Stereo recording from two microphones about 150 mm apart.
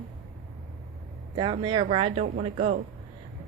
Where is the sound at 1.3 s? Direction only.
30° right (ahead or behind).